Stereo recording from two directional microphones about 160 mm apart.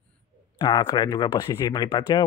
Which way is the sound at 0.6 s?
25° left (ahead or behind).